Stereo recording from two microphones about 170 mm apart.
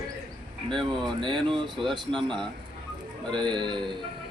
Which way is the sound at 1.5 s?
30° right (ahead or behind).